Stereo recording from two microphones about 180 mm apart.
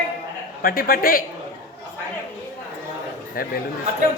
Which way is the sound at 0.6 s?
55° left (ahead or behind).